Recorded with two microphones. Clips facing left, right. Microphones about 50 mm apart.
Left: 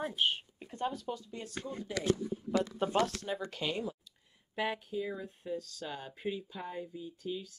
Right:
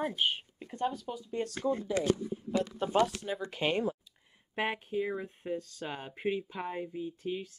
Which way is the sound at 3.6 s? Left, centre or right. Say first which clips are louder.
Right 7 dB; right.